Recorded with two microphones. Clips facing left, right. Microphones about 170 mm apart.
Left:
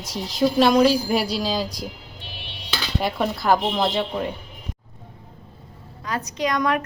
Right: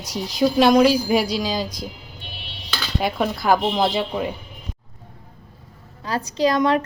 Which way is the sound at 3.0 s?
Centre (ahead or behind).